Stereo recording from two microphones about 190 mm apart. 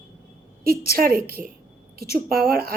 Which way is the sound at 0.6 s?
50° right (ahead or behind).